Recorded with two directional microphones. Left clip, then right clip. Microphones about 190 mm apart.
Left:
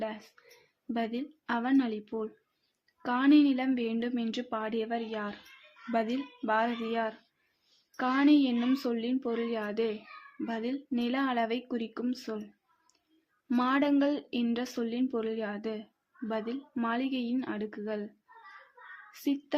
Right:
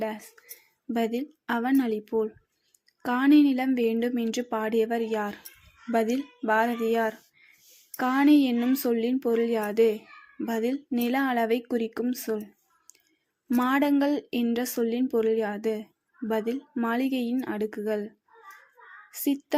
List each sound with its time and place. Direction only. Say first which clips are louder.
0.9 s a woman's voice: right 6 dB; 20° right (ahead or behind)
13.5 s a woman's voice: right 4 dB; 20° right (ahead or behind)
19.1 s speech: right 5 dB; 15° right (ahead or behind)